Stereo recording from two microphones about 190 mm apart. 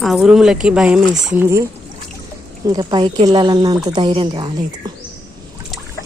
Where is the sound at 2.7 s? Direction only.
20° right (ahead or behind).